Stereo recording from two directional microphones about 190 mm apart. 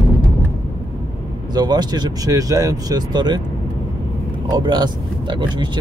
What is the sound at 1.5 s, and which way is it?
Speech, 20° right (ahead or behind).